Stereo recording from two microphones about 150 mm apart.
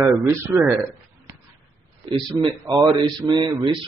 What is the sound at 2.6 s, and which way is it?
Speech, 20° right (ahead or behind).